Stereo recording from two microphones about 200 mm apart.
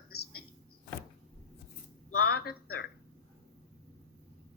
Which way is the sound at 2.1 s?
50° left (ahead or behind).